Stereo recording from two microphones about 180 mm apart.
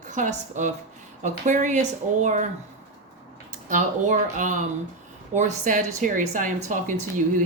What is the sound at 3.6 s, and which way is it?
A woman's voice, 45° right (ahead or behind).